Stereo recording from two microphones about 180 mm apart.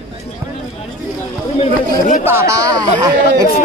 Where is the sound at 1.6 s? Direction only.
45° left (ahead or behind).